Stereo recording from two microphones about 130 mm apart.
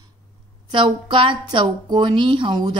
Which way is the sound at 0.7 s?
40° right (ahead or behind).